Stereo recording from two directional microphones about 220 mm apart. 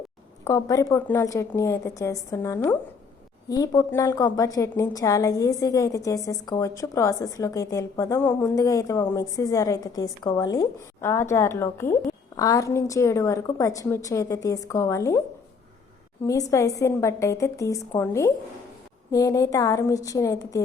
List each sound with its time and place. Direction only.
0.4 s a woman's voice: 15° left (ahead or behind)
16.2 s a woman's voice: 15° left (ahead or behind)